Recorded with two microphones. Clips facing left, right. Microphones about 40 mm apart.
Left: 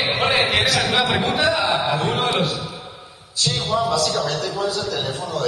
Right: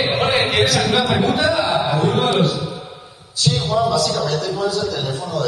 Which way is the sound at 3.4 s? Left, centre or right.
Left.